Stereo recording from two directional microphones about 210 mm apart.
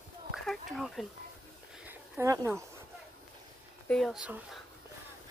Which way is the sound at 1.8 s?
10° right (ahead or behind).